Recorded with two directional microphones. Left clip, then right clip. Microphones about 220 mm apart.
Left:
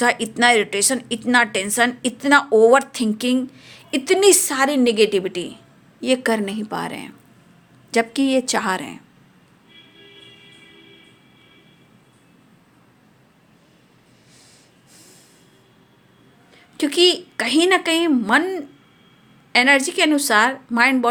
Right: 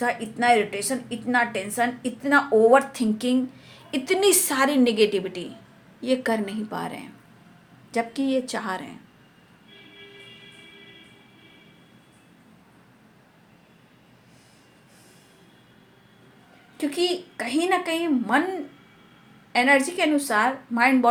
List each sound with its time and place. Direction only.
0.0 s a woman's voice: 45° left (ahead or behind)
16.7 s a woman's voice: 45° left (ahead or behind)